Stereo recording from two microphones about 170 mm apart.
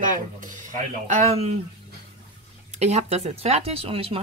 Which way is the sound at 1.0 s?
40° right (ahead or behind).